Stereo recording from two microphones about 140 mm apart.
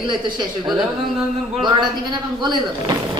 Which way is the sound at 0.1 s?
35° right (ahead or behind).